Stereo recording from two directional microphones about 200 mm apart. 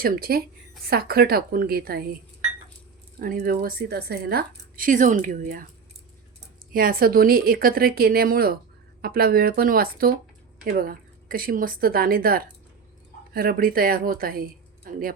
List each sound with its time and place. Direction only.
0.0 s a woman's voice: 50° right (ahead or behind)
3.2 s a woman's voice: 45° right (ahead or behind)
6.7 s a woman's voice: 45° right (ahead or behind)